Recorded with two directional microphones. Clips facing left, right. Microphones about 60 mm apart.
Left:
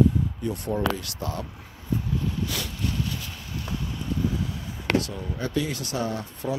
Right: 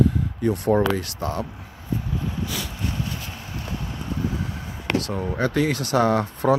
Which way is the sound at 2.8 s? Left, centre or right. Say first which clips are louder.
Right 1 dB; right.